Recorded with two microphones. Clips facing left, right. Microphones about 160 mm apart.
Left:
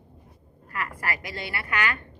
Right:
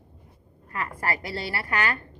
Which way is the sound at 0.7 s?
25° right (ahead or behind).